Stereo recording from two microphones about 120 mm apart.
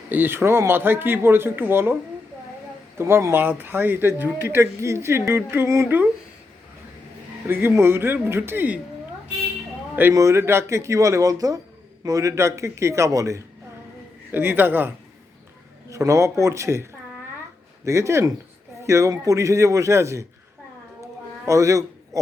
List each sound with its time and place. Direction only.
0.1 s speech: 15° right (ahead or behind)
3.0 s speech: 25° right (ahead or behind)
7.4 s speech: 20° right (ahead or behind)
9.9 s a man's voice: 15° right (ahead or behind)
14.3 s speech: 15° right (ahead or behind)
15.9 s speech: 25° right (ahead or behind)
21.0 s a sound: 25° right (ahead or behind)